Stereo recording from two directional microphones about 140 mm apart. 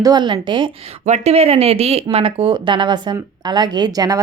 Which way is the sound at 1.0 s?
55° right (ahead or behind).